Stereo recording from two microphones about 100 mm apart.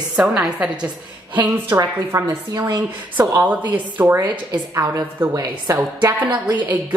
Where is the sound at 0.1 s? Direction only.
5° right (ahead or behind).